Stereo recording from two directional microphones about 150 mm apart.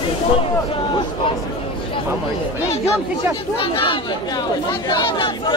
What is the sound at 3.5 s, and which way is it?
Speech, 35° left (ahead or behind).